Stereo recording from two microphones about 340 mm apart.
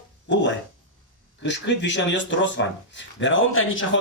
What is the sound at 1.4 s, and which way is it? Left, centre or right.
Speech, left.